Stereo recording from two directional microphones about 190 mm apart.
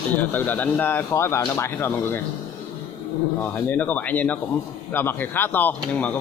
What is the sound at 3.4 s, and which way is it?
Speech, 10° left (ahead or behind).